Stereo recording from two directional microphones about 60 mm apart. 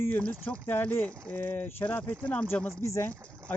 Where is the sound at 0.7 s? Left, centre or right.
Left.